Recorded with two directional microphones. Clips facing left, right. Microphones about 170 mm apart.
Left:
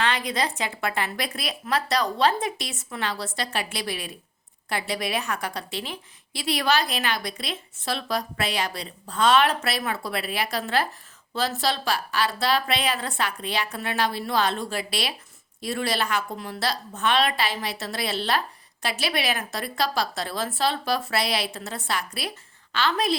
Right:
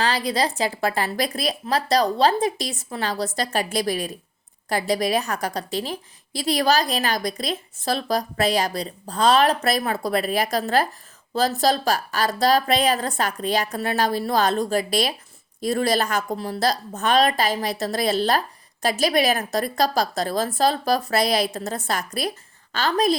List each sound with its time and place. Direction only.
0.0 s a woman's voice: 35° right (ahead or behind)